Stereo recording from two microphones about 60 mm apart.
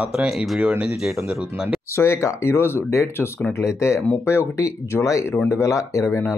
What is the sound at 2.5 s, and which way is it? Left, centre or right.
Speech, left.